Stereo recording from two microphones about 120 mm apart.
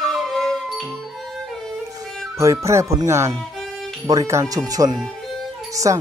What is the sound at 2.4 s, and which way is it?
Speech, 25° right (ahead or behind).